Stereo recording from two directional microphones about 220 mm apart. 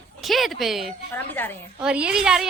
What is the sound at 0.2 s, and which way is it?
A woman's voice, centre (ahead or behind).